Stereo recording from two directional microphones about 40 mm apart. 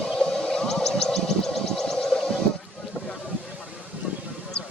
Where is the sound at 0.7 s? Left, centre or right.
Centre.